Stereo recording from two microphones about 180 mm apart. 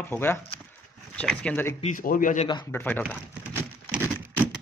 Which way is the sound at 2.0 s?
50° left (ahead or behind).